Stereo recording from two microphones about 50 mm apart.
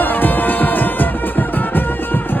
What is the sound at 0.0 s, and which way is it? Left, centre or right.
Music, left.